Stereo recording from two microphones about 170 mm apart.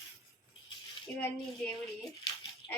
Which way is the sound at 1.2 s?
10° left (ahead or behind).